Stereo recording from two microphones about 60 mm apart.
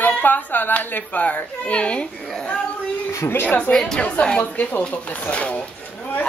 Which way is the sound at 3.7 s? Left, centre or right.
Centre.